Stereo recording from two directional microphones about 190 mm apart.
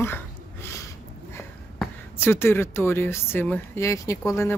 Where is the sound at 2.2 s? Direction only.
10° left (ahead or behind).